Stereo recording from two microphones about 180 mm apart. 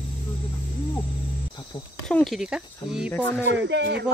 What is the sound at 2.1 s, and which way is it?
Speech, 5° left (ahead or behind).